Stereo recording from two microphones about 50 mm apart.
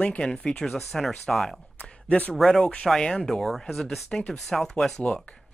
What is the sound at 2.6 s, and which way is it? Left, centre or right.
Speech, centre.